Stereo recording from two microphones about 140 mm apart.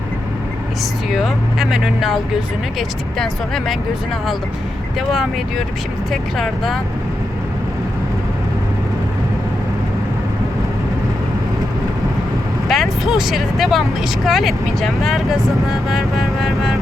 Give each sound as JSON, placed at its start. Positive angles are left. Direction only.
{"t": 1.1, "sound": "speech", "side_deg": 0}
{"t": 6.1, "sound": "speech", "side_deg": 0}
{"t": 12.6, "sound": "speech", "side_deg": 0}